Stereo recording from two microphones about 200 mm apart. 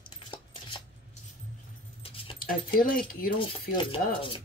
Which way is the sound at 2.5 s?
45° left (ahead or behind).